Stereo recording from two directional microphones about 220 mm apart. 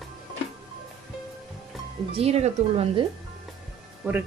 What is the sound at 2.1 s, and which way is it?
Speech, 25° right (ahead or behind).